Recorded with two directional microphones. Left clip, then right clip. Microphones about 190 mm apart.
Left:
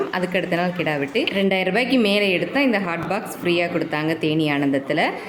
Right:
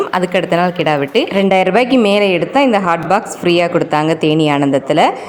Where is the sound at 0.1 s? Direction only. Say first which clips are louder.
Right 8 dB; 20° right (ahead or behind).